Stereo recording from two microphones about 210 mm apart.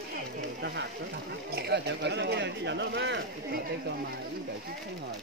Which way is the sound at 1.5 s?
50° right (ahead or behind).